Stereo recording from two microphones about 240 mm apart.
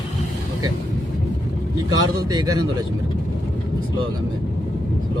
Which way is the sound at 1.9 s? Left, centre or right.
Centre.